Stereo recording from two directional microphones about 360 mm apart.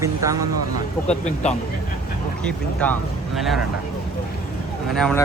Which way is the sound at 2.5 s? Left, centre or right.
Centre.